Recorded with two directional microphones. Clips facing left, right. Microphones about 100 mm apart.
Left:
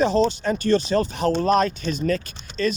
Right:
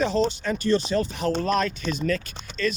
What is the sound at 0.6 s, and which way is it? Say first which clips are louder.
Speech: left 2 dB; 60° left (ahead or behind).